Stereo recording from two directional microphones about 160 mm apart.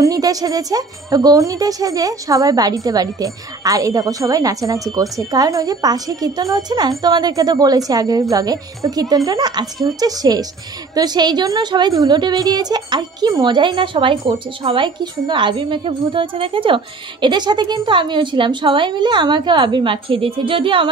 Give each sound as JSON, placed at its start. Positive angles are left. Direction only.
{"t": 0.0, "sound": "a woman's voice", "side_deg": -20}